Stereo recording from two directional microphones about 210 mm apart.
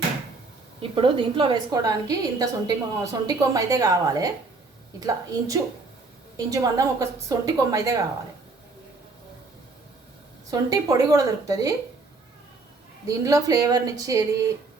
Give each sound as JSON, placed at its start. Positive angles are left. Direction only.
{"t": 0.8, "sound": "a woman's voice", "side_deg": -25}
{"t": 10.5, "sound": "a woman's voice", "side_deg": -15}
{"t": 13.1, "sound": "a woman's voice", "side_deg": -15}